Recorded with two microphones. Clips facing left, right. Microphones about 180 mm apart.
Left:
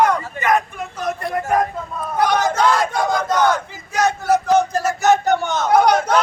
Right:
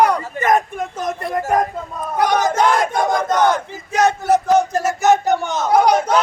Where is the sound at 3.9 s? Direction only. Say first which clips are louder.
Right 2 dB; 25° right (ahead or behind).